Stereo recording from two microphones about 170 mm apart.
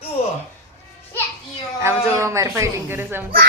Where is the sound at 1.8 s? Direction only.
15° right (ahead or behind).